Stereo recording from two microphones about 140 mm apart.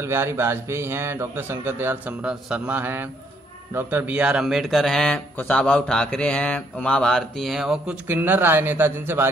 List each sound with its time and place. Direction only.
0.0 s a man's voice: 20° right (ahead or behind)